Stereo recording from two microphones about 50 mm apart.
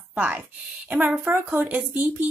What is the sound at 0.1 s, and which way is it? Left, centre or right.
Speech, right.